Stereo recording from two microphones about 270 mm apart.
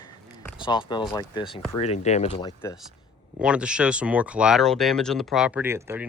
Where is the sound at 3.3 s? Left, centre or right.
Centre.